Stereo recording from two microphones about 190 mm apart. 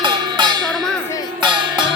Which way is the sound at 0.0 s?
25° right (ahead or behind).